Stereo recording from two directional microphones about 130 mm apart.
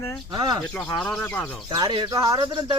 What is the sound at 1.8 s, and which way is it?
Speech, 40° right (ahead or behind).